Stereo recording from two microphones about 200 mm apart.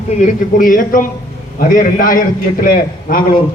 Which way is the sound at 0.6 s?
40° left (ahead or behind).